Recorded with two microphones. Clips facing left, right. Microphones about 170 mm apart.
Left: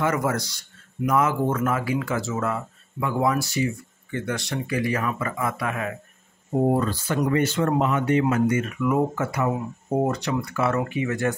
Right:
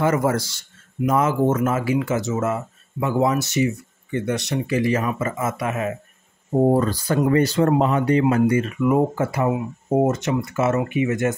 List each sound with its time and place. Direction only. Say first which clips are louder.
0.0 s speech: right 4 dB; 30° right (ahead or behind)
6.7 s speech: right 4 dB; 40° right (ahead or behind); by 11.3 s 20° right (ahead or behind)